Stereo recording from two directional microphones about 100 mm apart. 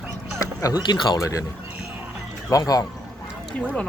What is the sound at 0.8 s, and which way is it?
Speech, 45° left (ahead or behind).